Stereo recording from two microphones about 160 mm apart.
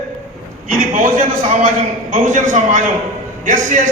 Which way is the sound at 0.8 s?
55° right (ahead or behind).